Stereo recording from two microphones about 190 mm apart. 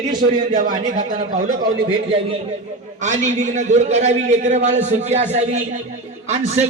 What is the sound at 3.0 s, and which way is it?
A man's voice, 40° right (ahead or behind).